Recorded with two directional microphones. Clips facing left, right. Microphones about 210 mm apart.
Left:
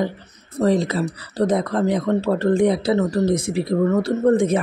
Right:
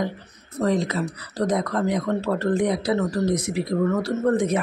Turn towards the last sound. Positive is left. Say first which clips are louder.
# left 4 dB
turn(degrees=25)  # may be behind; listen again after turning